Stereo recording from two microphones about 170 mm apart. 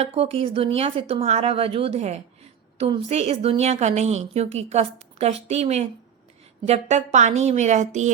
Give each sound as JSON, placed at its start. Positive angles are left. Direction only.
{"t": 0.0, "sound": "a woman's voice", "side_deg": -35}